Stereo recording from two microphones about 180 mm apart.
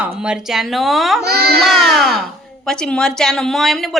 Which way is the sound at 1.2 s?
60° right (ahead or behind).